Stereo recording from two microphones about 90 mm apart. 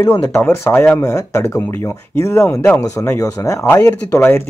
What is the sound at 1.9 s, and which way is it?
Speech, 30° left (ahead or behind).